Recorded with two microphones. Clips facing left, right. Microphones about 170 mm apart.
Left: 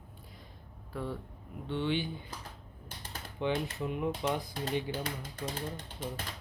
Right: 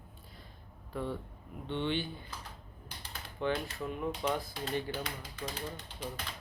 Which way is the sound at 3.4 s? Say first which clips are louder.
Left 1 dB; 20° left (ahead or behind).